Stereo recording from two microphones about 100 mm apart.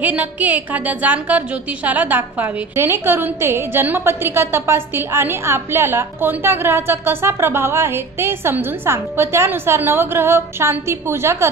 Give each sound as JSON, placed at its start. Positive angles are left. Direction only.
{"t": 0.0, "sound": "a woman's voice", "side_deg": -15}